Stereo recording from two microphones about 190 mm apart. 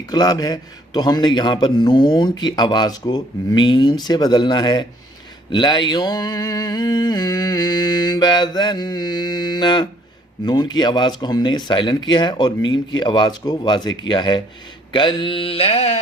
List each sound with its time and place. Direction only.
0.1 s mantra: 20° left (ahead or behind)